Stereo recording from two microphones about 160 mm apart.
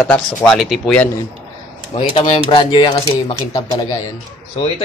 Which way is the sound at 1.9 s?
35° left (ahead or behind).